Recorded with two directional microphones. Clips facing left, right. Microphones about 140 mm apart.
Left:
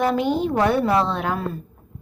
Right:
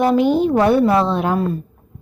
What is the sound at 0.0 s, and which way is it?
A woman's voice, 10° right (ahead or behind).